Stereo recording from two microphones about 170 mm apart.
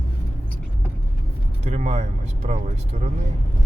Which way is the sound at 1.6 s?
40° right (ahead or behind).